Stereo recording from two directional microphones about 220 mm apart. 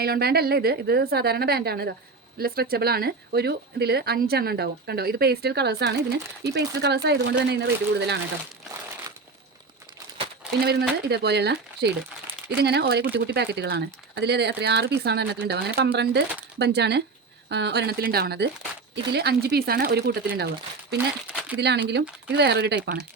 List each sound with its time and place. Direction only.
0.0 s speech: 45° right (ahead or behind)
10.6 s speech: 45° right (ahead or behind)
21.2 s speech: 5° right (ahead or behind)
21.6 s speech: 50° right (ahead or behind)